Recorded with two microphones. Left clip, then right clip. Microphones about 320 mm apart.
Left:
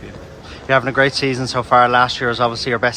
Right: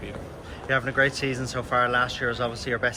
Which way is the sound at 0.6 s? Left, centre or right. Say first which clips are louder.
Left 8 dB; centre.